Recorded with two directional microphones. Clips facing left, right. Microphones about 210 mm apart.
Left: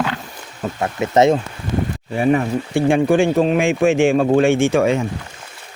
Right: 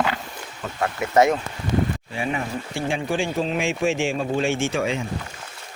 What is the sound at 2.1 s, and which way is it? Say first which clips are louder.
Speech: left 10 dB; 45° left (ahead or behind).